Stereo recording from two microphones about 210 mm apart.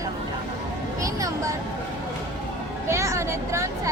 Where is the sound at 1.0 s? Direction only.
15° right (ahead or behind).